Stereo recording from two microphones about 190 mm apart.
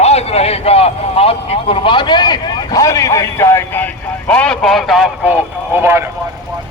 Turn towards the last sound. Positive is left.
turn(degrees=-10)  # may be behind; listen again after turning